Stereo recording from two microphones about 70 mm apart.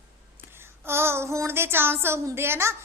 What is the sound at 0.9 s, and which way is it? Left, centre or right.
Speech, right.